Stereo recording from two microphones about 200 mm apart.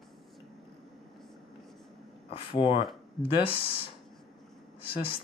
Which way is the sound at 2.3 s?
25° left (ahead or behind).